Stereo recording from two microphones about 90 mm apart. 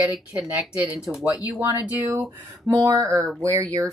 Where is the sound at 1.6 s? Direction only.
25° right (ahead or behind).